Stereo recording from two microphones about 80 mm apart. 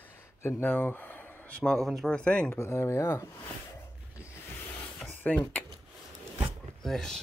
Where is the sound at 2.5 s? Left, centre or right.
Left.